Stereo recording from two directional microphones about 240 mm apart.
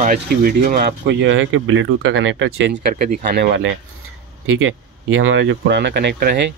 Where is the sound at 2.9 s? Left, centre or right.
Right.